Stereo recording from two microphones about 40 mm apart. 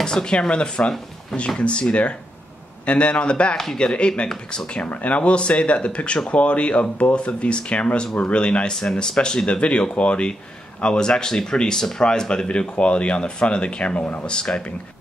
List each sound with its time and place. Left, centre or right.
0.0 s a man's voice: centre
8.7 s speech: centre; by 14.2 s left
14.2 s speech: left